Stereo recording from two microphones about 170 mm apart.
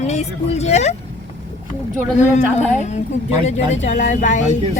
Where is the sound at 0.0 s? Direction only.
40° left (ahead or behind).